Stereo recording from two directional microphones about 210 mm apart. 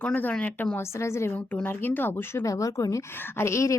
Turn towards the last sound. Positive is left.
turn(degrees=15)  # may be behind; listen again after turning